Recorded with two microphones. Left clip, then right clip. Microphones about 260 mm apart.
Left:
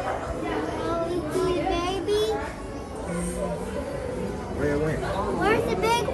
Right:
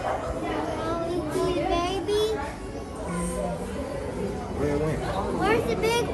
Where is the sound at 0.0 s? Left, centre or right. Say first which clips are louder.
Even; centre.